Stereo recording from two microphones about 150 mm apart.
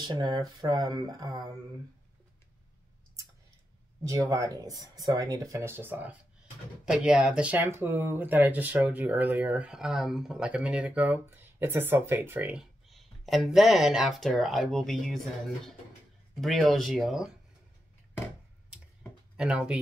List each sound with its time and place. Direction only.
0.0 s speech: 30° right (ahead or behind)
4.0 s speech: 20° right (ahead or behind); by 17.3 s centre (ahead or behind)
19.3 s speech: 5° right (ahead or behind)